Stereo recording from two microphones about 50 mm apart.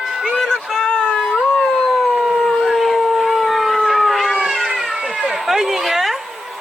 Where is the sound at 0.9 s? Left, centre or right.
Left.